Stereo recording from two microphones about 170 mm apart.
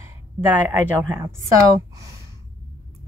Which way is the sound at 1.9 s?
20° right (ahead or behind).